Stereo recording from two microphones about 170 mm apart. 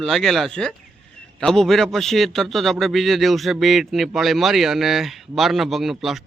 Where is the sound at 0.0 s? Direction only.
Centre (ahead or behind).